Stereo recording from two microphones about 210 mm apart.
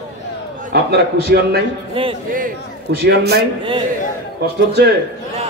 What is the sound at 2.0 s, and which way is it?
Speech, 25° right (ahead or behind).